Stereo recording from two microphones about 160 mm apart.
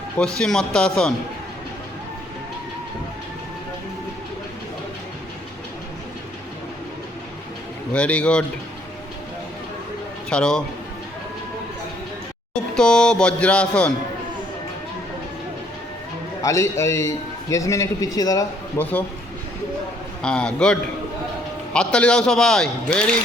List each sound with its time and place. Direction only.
0.2 s a man's voice: 5° left (ahead or behind)
7.9 s speech: 5° left (ahead or behind)
10.2 s a man's voice: 5° left (ahead or behind)
12.7 s a man's voice: 5° left (ahead or behind)
16.4 s a man's voice: 20° left (ahead or behind)
20.2 s a man's voice: 5° left (ahead or behind)